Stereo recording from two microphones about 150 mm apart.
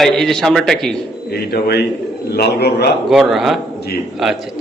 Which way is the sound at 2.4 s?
90° left.